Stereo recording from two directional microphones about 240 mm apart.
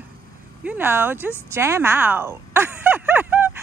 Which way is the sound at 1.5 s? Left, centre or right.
Centre.